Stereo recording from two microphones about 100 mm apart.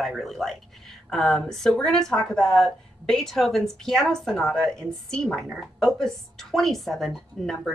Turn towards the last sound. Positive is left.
turn(degrees=0)  # may be behind; listen again after turning